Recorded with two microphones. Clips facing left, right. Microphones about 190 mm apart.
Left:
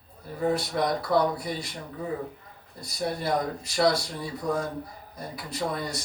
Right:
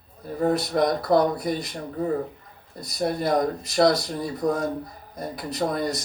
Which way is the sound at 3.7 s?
45° right (ahead or behind).